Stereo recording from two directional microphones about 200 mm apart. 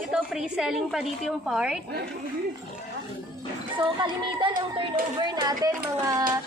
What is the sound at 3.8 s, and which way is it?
A woman's voice, 25° right (ahead or behind).